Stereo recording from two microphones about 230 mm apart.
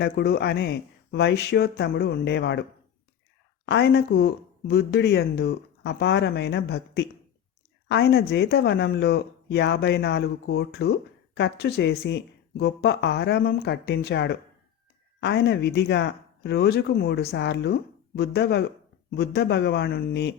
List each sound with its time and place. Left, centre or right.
0.0 s speech: left
3.7 s speech: left